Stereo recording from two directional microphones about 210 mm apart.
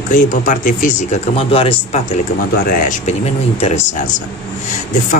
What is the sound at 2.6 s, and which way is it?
Speech, 40° left (ahead or behind).